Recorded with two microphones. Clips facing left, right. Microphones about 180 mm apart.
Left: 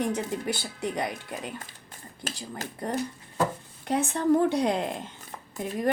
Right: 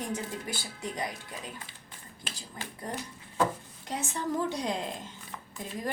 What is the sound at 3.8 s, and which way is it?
A woman's voice, 60° left (ahead or behind).